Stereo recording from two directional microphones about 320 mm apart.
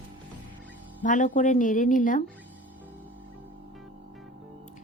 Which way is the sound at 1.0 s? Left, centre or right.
Left.